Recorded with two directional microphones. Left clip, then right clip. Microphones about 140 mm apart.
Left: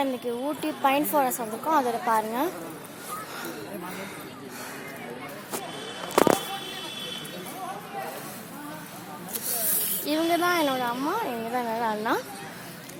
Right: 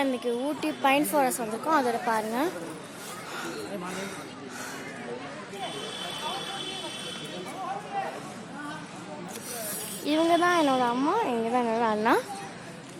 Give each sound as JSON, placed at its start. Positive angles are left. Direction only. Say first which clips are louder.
{"t": 0.0, "sound": "speech", "louder": "even", "side_deg": -10}
{"t": 10.1, "sound": "speech", "louder": "right 1 dB", "side_deg": -40}